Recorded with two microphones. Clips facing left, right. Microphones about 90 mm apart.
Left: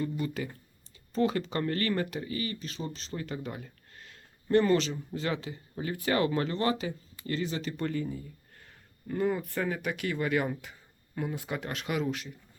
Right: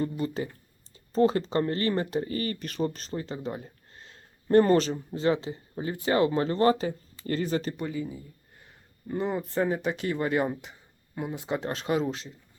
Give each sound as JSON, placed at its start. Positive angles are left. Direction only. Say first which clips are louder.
{"t": 0.0, "sound": "speech", "louder": "right 3 dB", "side_deg": -30}
{"t": 3.1, "sound": "speech", "louder": "right 3 dB", "side_deg": -25}
{"t": 7.8, "sound": "speech", "louder": "even", "side_deg": -10}
{"t": 8.6, "sound": "speech", "louder": "right 1 dB", "side_deg": -20}